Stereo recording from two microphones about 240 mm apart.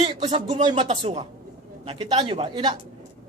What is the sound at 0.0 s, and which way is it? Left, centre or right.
Speech, right.